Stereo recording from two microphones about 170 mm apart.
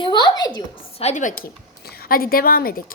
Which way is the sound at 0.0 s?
30° left (ahead or behind).